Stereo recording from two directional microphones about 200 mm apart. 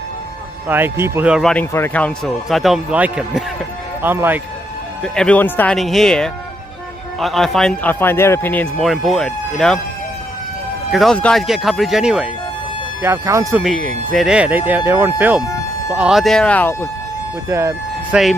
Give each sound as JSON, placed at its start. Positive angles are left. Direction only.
{"t": 0.7, "sound": "a man's voice", "side_deg": -10}
{"t": 5.0, "sound": "a man's voice", "side_deg": 5}
{"t": 10.9, "sound": "a man's voice", "side_deg": 0}
{"t": 13.0, "sound": "speech", "side_deg": -15}
{"t": 13.6, "sound": "a man's voice", "side_deg": 5}
{"t": 17.5, "sound": "speech", "side_deg": -15}